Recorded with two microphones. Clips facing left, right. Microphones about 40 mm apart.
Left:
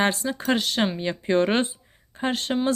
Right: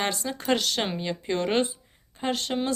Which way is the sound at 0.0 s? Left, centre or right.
Left.